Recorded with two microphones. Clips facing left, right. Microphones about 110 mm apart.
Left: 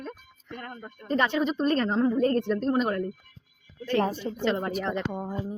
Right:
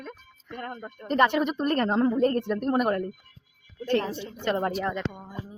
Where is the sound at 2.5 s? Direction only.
10° right (ahead or behind).